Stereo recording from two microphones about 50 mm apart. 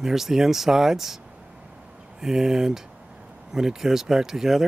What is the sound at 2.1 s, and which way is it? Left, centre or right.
Speech, centre.